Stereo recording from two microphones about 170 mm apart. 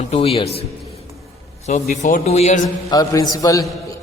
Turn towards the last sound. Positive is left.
turn(degrees=20)  # may be behind; listen again after turning